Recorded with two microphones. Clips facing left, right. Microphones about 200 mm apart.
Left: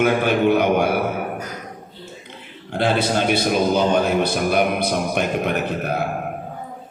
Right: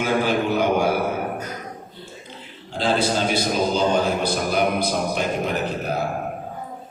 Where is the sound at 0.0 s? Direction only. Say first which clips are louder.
Left 4 dB; 60° left (ahead or behind).